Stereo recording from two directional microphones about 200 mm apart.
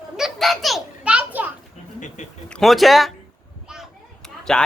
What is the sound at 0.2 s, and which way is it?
Children playing, centre (ahead or behind).